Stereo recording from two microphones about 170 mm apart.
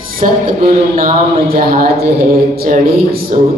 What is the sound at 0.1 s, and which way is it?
Speech, 55° right (ahead or behind).